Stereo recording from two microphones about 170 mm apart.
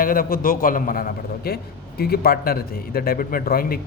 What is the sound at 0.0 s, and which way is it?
Speech, 55° left (ahead or behind).